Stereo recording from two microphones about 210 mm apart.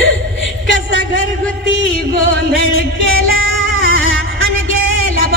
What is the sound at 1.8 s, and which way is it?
Music, 65° left (ahead or behind).